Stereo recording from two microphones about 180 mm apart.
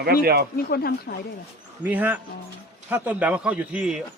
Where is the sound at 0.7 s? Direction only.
60° left (ahead or behind).